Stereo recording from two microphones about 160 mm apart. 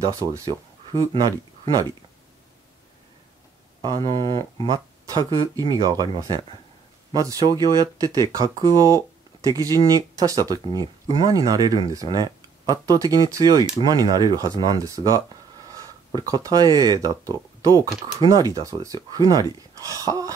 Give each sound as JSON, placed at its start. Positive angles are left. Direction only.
{"t": 0.0, "sound": "speech", "side_deg": -20}
{"t": 3.8, "sound": "speech", "side_deg": -25}
{"t": 7.1, "sound": "speech", "side_deg": -25}